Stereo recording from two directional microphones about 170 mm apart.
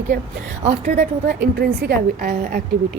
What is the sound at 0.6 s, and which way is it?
Speech, 40° right (ahead or behind).